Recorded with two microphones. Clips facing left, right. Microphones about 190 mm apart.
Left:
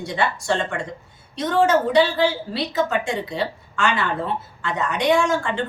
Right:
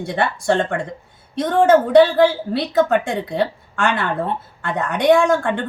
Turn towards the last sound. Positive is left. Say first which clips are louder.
# right 4 dB
turn(degrees=-55)  # may be behind; listen again after turning